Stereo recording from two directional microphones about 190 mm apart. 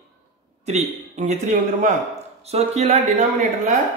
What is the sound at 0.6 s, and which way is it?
Speech, 35° right (ahead or behind).